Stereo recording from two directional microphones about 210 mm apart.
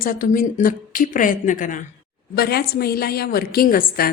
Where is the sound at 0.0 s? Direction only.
40° left (ahead or behind).